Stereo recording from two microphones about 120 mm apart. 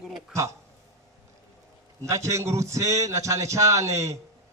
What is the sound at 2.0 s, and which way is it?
A man's voice, 25° right (ahead or behind).